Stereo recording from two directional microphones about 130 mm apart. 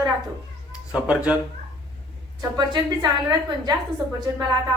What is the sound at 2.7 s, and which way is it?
A woman's voice, 35° right (ahead or behind).